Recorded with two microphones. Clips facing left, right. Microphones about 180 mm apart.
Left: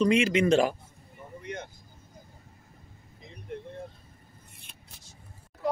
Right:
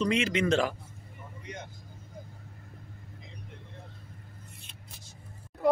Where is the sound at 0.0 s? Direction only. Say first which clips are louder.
Left 4 dB; 15° left (ahead or behind).